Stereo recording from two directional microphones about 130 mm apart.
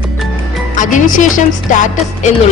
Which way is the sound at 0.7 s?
80° left.